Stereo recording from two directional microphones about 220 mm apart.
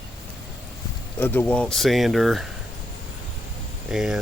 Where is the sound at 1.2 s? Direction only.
5° left (ahead or behind).